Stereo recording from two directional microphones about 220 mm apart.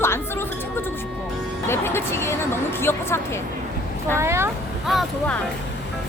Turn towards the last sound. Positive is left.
turn(degrees=0)  # may be behind; listen again after turning